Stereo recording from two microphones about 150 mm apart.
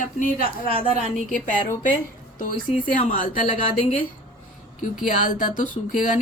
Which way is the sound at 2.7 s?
60° left (ahead or behind).